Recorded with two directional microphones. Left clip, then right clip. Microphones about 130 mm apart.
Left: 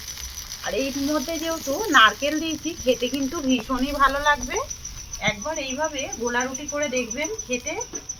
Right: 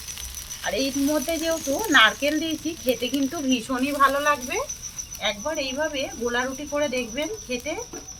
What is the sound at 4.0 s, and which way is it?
Speech, 15° right (ahead or behind).